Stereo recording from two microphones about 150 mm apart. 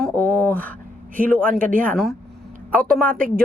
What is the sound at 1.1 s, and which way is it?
Speech, 65° right (ahead or behind).